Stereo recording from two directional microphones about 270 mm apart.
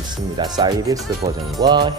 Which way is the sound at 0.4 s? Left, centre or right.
Centre.